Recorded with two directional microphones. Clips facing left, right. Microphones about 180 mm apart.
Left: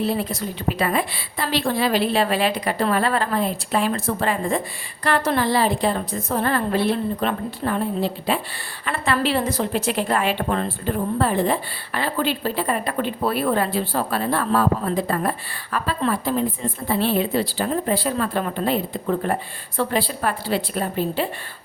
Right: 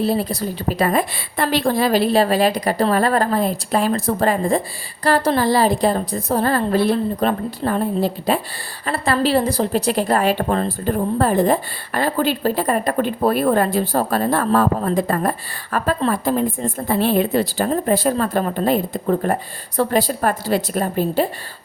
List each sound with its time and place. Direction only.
0.0 s a woman's voice: 35° right (ahead or behind)